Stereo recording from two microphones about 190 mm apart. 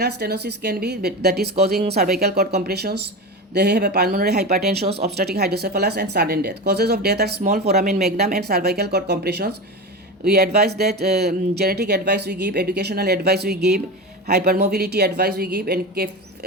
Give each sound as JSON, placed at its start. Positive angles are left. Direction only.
{"t": 0.0, "sound": "speech", "side_deg": -60}